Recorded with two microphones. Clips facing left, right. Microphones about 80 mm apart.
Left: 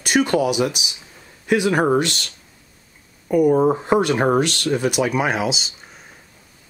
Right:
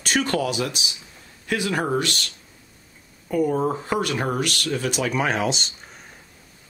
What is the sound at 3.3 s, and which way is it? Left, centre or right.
Speech, centre.